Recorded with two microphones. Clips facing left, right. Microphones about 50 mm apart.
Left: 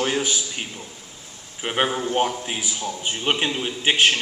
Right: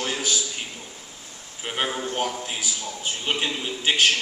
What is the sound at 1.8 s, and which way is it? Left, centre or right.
A man's voice, centre.